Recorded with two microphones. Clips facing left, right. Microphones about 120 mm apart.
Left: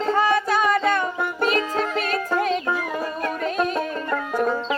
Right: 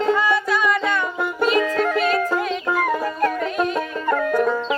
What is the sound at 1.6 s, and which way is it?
Music, 60° right (ahead or behind).